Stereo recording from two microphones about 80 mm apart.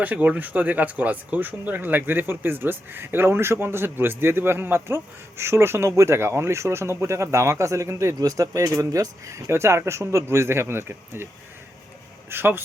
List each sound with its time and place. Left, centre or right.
0.0 s speech: right
12.3 s speech: right